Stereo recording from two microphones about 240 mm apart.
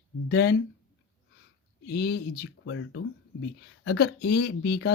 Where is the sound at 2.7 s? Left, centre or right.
Left.